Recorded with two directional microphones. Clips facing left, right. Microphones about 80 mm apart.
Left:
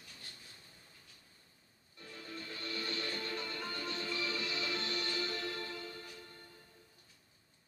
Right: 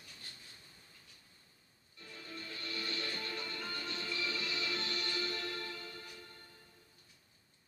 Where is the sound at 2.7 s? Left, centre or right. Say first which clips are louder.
Left 1 dB; left.